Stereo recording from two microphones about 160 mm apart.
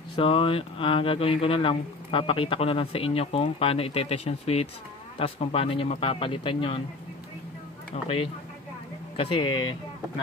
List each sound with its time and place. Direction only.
0.1 s speech: 35° left (ahead or behind)
7.9 s speech: 40° left (ahead or behind)